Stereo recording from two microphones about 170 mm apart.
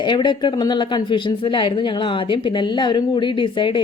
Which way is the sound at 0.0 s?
25° left (ahead or behind).